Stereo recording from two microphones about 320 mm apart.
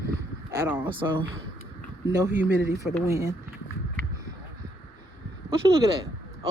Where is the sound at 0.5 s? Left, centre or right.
Centre.